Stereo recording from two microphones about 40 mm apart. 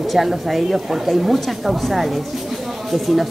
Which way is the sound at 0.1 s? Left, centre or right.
Centre.